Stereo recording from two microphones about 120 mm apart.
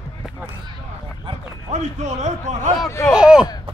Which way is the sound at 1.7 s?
75° right (ahead or behind).